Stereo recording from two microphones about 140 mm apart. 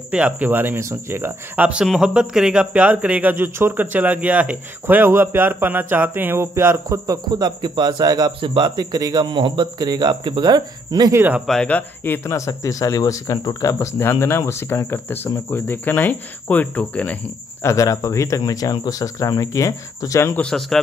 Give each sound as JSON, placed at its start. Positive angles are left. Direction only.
{"t": 0.1, "sound": "speech", "side_deg": -10}
{"t": 11.1, "sound": "speech", "side_deg": -10}
{"t": 11.4, "sound": "speech", "side_deg": 5}
{"t": 17.6, "sound": "speech", "side_deg": 25}
{"t": 20.4, "sound": "a man's voice", "side_deg": 5}